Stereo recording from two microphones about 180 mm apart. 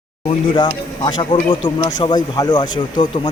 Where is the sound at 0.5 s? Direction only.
25° left (ahead or behind).